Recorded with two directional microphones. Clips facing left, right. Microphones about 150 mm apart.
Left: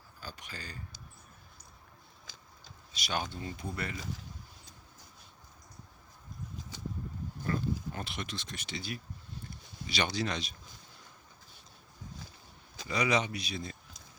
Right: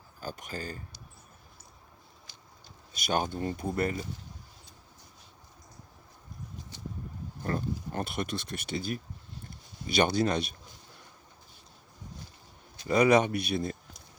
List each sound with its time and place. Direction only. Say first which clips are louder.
0.2 s speech: right 8 dB; 45° right (ahead or behind)
2.9 s speech: right 6 dB; 50° right (ahead or behind)
7.4 s speech: right 1 dB; 45° right (ahead or behind)
12.9 s speech: right 8 dB; 50° right (ahead or behind)